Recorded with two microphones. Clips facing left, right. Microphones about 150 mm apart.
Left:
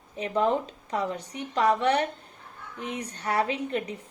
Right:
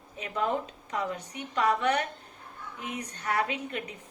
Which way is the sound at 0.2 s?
30° left (ahead or behind).